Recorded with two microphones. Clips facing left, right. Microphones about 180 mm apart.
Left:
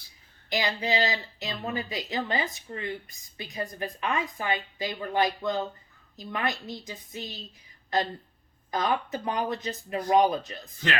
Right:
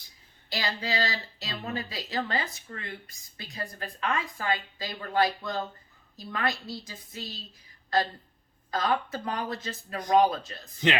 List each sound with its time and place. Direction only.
0.5 s speech: 20° left (ahead or behind)
8.7 s speech: 20° left (ahead or behind)